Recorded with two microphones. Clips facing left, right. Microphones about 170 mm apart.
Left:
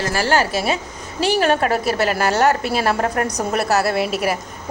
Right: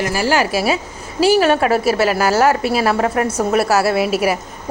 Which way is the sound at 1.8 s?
5° right (ahead or behind).